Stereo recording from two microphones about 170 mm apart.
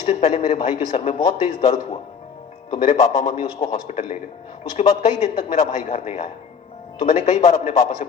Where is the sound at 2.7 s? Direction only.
40° left (ahead or behind).